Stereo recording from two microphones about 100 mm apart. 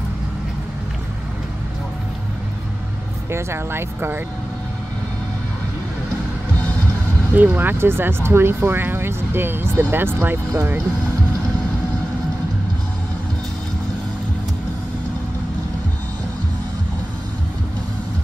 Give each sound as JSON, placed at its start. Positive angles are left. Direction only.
{"t": 3.3, "sound": "speech", "side_deg": -25}
{"t": 7.3, "sound": "speech", "side_deg": -20}